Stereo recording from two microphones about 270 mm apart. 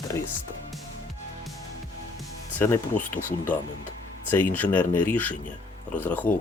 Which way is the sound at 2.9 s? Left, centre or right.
Left.